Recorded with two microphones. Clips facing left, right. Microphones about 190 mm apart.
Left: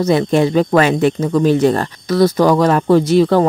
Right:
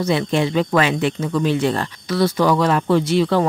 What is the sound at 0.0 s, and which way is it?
Speech, 45° left (ahead or behind).